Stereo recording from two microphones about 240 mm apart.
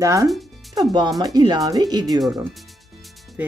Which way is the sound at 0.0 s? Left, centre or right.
Centre.